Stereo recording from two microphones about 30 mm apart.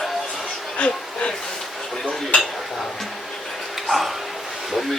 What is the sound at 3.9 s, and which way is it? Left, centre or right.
Speech, centre.